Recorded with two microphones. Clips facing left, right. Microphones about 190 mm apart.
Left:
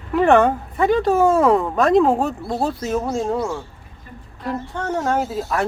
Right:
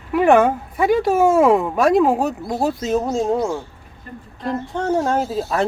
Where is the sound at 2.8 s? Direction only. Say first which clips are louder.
Right 2 dB; 20° right (ahead or behind).